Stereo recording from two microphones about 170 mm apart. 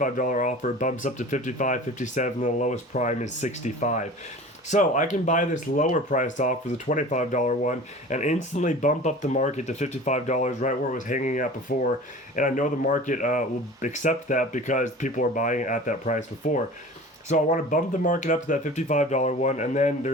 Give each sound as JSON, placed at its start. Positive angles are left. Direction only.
{"t": 0.0, "sound": "speech", "side_deg": 50}